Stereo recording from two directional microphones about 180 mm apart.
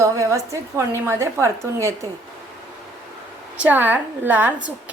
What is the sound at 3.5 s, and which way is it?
Speech, 10° right (ahead or behind).